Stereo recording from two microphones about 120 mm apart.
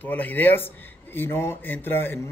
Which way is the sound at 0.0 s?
15° left (ahead or behind).